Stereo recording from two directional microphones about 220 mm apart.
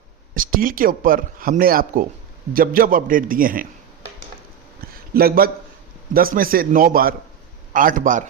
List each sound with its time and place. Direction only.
0.3 s speech: 40° right (ahead or behind)
5.1 s a man's voice: 45° right (ahead or behind)